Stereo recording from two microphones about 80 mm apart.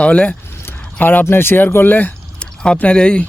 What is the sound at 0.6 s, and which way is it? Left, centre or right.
Speech, left.